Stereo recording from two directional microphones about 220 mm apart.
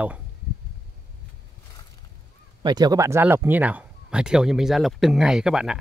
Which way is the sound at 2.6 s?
20° right (ahead or behind).